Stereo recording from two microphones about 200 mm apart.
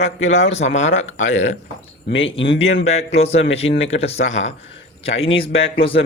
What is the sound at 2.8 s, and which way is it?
Speech, 30° left (ahead or behind).